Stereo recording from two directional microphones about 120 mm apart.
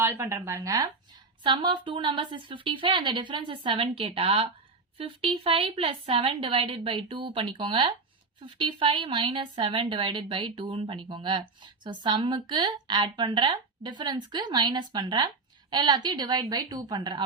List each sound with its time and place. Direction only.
0.0 s speech: 20° right (ahead or behind)
1.5 s a woman's voice: 40° right (ahead or behind)